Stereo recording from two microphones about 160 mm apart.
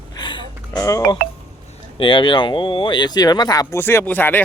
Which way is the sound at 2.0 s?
30° left (ahead or behind).